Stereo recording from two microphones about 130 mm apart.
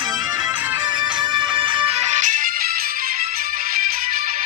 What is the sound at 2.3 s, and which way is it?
Music, 90° right.